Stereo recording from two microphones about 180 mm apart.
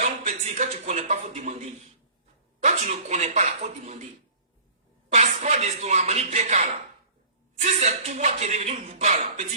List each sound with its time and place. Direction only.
0.0 s a sound: 40° right (ahead or behind)
2.6 s speech: 40° right (ahead or behind)
5.0 s speech: 40° right (ahead or behind)